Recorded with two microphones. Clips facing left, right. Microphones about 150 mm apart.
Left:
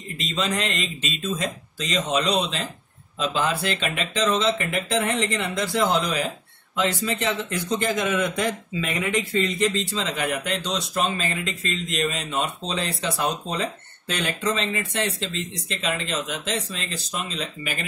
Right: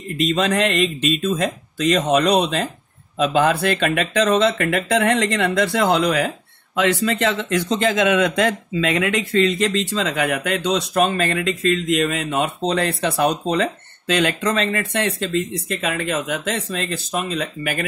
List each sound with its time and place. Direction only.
0.2 s speech: 60° right (ahead or behind)